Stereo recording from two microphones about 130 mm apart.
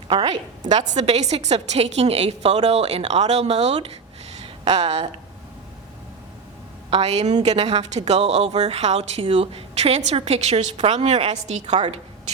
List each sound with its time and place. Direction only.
0.9 s a woman's voice: 60° right (ahead or behind)
4.4 s a sound: 50° right (ahead or behind)
6.9 s a woman's voice: 55° right (ahead or behind)